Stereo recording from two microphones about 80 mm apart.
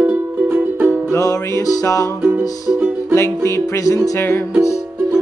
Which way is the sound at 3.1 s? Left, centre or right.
Left.